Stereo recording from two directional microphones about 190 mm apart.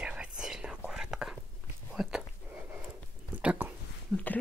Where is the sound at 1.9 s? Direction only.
Centre (ahead or behind).